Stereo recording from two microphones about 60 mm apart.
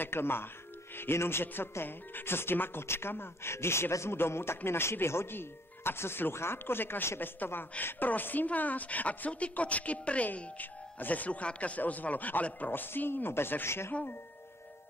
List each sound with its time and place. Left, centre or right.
0.0 s a woman's voice: left